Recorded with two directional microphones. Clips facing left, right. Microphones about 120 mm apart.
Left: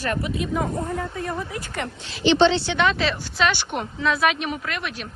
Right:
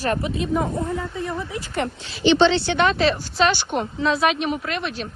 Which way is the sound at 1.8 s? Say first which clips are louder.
Right 2 dB; 40° right (ahead or behind).